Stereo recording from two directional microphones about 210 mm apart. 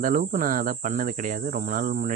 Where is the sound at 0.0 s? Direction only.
40° right (ahead or behind).